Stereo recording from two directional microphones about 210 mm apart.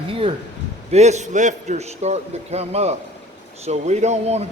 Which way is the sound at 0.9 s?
30° right (ahead or behind).